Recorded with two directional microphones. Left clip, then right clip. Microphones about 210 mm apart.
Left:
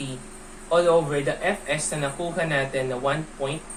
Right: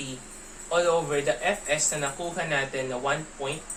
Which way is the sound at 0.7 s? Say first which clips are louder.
Left 4 dB; centre (ahead or behind).